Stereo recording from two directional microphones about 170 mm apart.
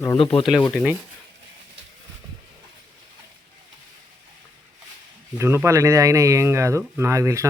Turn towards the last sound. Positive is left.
turn(degrees=-15)  # may be behind; listen again after turning